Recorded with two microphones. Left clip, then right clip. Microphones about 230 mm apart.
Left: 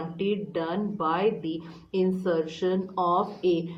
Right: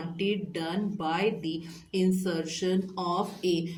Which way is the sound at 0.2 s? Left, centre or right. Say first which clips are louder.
Left 2 dB; right.